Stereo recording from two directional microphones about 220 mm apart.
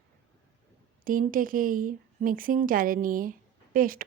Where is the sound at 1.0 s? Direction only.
40° right (ahead or behind).